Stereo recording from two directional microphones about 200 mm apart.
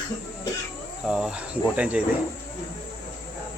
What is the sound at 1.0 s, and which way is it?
Speech, centre (ahead or behind).